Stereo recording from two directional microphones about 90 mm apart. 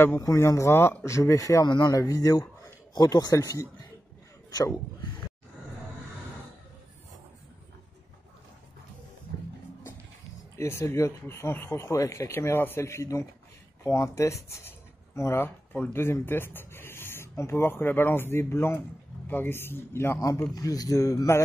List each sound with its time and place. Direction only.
0.2 s a man's voice: 40° left (ahead or behind)
10.6 s a man's voice: 30° left (ahead or behind)
20.5 s speech: 45° left (ahead or behind)